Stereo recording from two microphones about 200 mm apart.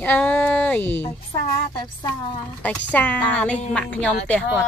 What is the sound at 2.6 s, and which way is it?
Speech, 10° left (ahead or behind).